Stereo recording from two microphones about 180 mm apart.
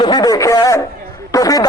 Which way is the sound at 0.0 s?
25° left (ahead or behind).